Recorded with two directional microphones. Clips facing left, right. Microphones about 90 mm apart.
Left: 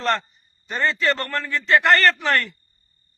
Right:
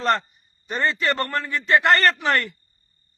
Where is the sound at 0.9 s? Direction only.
20° right (ahead or behind).